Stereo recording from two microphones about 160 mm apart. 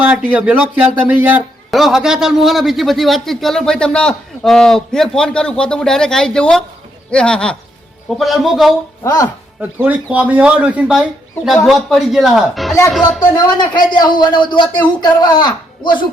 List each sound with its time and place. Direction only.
0.0 s speech: 10° right (ahead or behind)
9.0 s speech: 25° left (ahead or behind)
9.6 s speech: 10° right (ahead or behind)
13.3 s speech: 25° left (ahead or behind)